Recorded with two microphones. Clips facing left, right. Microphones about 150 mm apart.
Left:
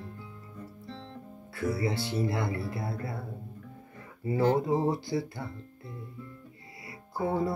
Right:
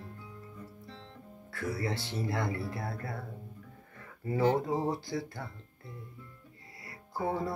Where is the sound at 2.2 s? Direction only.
5° left (ahead or behind).